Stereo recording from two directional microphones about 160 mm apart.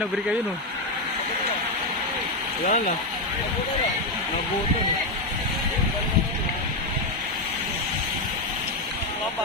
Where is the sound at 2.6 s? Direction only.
60° left (ahead or behind).